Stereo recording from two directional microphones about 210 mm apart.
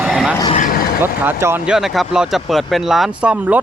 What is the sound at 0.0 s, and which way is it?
Vehicle, 5° right (ahead or behind).